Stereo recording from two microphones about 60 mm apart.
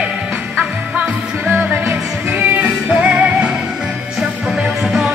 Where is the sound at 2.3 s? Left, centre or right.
Right.